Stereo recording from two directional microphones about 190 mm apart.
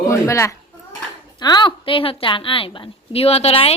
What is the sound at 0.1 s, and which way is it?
A child's voice, 15° left (ahead or behind).